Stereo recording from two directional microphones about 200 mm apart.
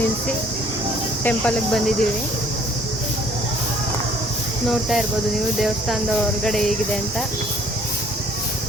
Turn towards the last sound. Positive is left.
turn(degrees=0)  # may be behind; listen again after turning